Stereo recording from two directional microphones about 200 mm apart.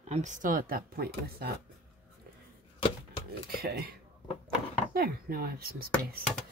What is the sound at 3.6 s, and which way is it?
Speech, 50° right (ahead or behind).